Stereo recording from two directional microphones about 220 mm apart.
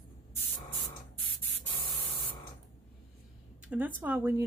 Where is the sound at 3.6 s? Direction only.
5° right (ahead or behind).